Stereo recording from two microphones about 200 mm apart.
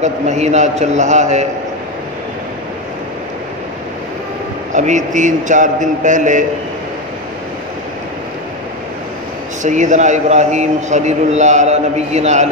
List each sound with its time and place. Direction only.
0.0 s a man's voice: 35° right (ahead or behind)
4.7 s a man's voice: 40° right (ahead or behind)
9.6 s a man's voice: 40° right (ahead or behind)